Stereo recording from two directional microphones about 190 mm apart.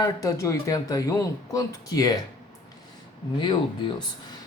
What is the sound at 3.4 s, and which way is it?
Speech, 25° left (ahead or behind).